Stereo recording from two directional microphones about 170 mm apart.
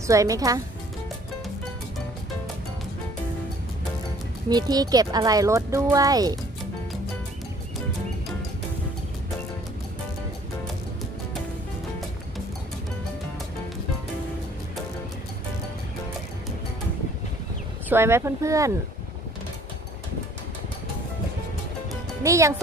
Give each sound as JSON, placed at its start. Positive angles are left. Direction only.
{"t": 0.0, "sound": "speech", "side_deg": -20}
{"t": 4.5, "sound": "speech", "side_deg": -25}
{"t": 17.8, "sound": "speech", "side_deg": -15}
{"t": 22.2, "sound": "speech", "side_deg": -20}